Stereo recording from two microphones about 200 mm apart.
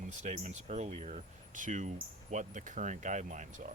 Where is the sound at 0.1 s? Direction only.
35° right (ahead or behind).